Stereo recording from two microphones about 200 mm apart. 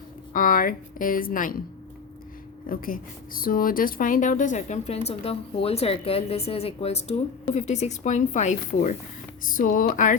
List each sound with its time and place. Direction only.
0.3 s a woman's voice: 45° left (ahead or behind)
2.6 s a woman's voice: 45° left (ahead or behind)